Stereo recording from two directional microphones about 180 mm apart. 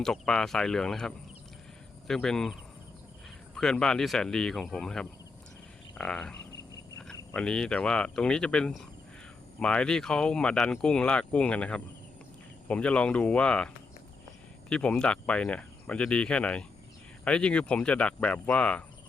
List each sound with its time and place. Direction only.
0.0 s speech: 5° left (ahead or behind)
7.3 s speech: 5° left (ahead or behind)
14.7 s speech: 5° left (ahead or behind)